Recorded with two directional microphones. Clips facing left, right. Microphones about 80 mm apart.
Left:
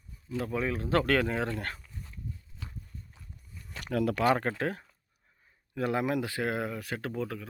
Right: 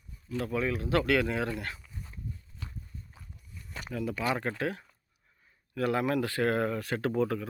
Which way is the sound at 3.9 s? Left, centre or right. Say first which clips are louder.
Left 6 dB; left.